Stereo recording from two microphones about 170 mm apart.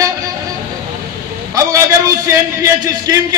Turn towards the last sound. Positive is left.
turn(degrees=-20)  # may be behind; listen again after turning